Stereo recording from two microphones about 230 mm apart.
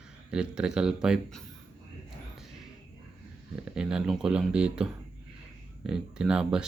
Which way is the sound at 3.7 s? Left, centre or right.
Centre.